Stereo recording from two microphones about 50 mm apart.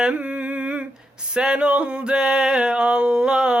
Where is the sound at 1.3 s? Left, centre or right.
Centre.